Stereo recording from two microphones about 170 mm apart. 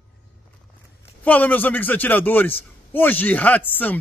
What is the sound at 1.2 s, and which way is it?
A man's voice, 10° left (ahead or behind).